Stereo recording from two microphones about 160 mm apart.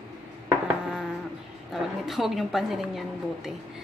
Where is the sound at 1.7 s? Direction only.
Centre (ahead or behind).